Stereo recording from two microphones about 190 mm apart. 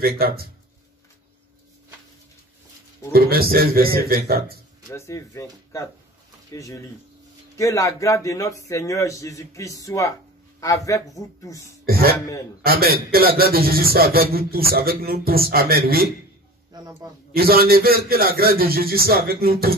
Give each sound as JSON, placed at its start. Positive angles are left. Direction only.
{"t": 0.0, "sound": "speech", "side_deg": -55}
{"t": 3.1, "sound": "speech", "side_deg": -55}
{"t": 4.9, "sound": "a man's voice", "side_deg": 15}
{"t": 11.8, "sound": "a man's voice", "side_deg": -55}
{"t": 16.7, "sound": "a man's voice", "side_deg": -20}
{"t": 17.3, "sound": "speech", "side_deg": -55}